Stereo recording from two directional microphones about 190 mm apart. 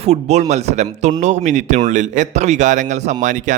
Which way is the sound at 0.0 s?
35° right (ahead or behind).